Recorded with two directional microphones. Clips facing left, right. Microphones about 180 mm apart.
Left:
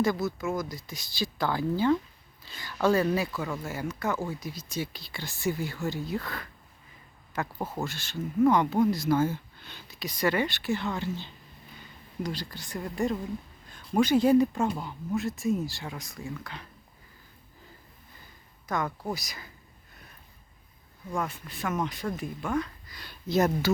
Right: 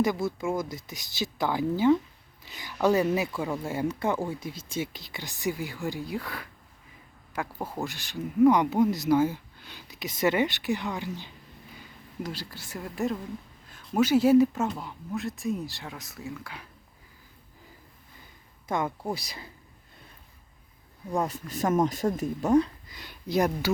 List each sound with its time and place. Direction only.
0.2 s speech: 25° right (ahead or behind); by 16.6 s 10° right (ahead or behind)
18.7 s speech: 25° right (ahead or behind)
21.1 s speech: 35° right (ahead or behind)
22.9 s speech: 20° right (ahead or behind)